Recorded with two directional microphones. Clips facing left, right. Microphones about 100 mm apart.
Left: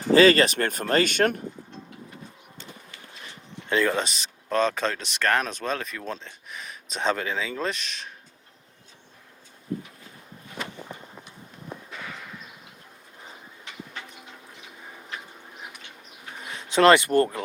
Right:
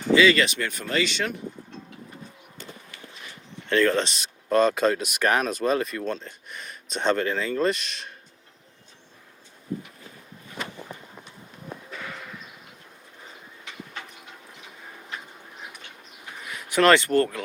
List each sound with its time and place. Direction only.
0.1 s speech: 40° left (ahead or behind)
3.7 s speech: 15° left (ahead or behind)
16.4 s speech: 30° left (ahead or behind)